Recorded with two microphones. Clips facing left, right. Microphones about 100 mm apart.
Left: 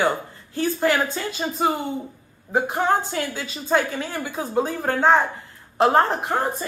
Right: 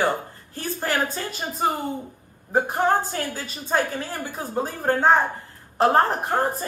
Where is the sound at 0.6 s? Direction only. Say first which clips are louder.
Left 5 dB; 40° right (ahead or behind).